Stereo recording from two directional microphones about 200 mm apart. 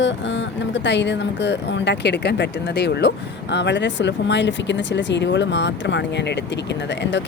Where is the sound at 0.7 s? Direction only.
60° left (ahead or behind).